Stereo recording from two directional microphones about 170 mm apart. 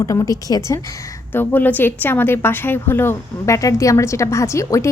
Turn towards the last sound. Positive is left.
turn(degrees=15)  # may be behind; listen again after turning